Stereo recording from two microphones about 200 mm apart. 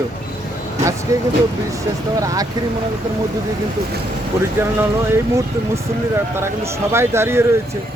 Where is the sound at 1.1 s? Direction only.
15° right (ahead or behind).